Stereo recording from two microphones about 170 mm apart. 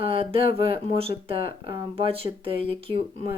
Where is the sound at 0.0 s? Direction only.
35° right (ahead or behind).